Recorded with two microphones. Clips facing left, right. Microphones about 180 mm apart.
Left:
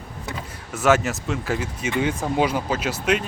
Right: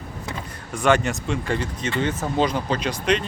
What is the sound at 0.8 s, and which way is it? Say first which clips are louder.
Speech: even; 5° left (ahead or behind).